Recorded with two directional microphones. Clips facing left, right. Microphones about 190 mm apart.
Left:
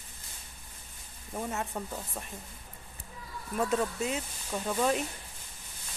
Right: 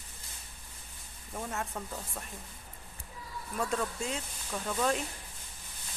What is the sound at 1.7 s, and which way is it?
Speech, 10° left (ahead or behind).